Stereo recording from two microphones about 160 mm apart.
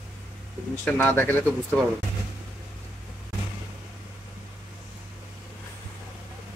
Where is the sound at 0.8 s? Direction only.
10° left (ahead or behind).